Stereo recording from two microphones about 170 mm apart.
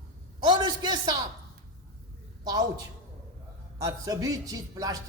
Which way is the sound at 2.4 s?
25° right (ahead or behind).